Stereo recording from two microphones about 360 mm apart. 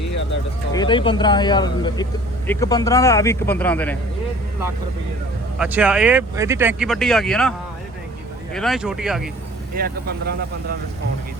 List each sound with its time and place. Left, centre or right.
0.7 s speech: centre
5.5 s speech: centre
8.5 s speech: centre
9.7 s speech: right